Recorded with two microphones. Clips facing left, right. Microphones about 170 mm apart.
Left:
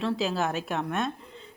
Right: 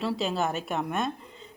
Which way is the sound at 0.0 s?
Centre (ahead or behind).